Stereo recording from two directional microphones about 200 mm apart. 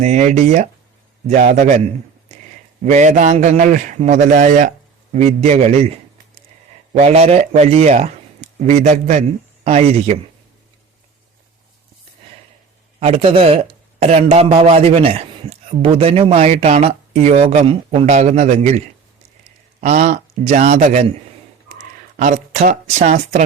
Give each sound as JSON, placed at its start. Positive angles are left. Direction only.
{"t": 0.0, "sound": "a man's voice", "side_deg": -35}
{"t": 2.8, "sound": "a man's voice", "side_deg": -35}
{"t": 6.9, "sound": "a man's voice", "side_deg": -30}
{"t": 13.0, "sound": "a man's voice", "side_deg": -30}
{"t": 19.8, "sound": "a man's voice", "side_deg": -40}
{"t": 22.2, "sound": "a man's voice", "side_deg": -40}